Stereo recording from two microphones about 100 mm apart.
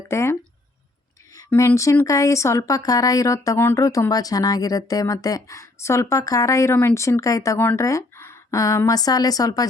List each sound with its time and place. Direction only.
0.1 s speech: 30° left (ahead or behind)
1.5 s a woman's voice: 30° left (ahead or behind)